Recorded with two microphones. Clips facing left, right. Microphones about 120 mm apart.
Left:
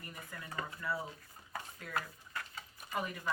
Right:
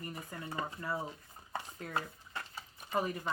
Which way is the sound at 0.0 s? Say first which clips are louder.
Right 5 dB; 30° right (ahead or behind).